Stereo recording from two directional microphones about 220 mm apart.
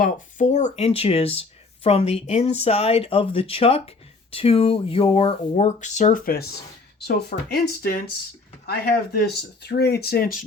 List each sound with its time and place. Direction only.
0.0 s speech: 35° left (ahead or behind)